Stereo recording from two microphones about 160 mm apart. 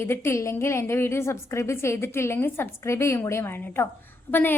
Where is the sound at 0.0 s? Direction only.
15° left (ahead or behind).